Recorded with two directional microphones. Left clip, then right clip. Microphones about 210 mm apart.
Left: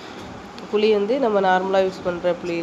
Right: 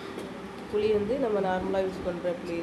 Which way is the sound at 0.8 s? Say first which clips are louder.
Left 8 dB; 20° left (ahead or behind).